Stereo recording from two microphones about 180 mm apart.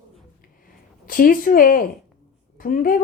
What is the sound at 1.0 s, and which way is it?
Speech, 50° left (ahead or behind).